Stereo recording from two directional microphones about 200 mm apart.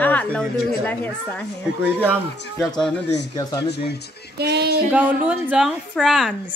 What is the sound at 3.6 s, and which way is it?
Speech, 55° left (ahead or behind).